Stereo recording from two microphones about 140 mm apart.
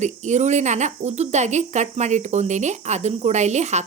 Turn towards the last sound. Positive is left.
turn(degrees=-55)  # may be behind; listen again after turning